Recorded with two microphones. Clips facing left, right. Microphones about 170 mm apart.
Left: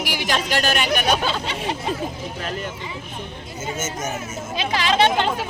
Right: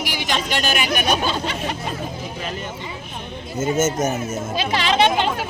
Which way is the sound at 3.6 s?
40° right (ahead or behind).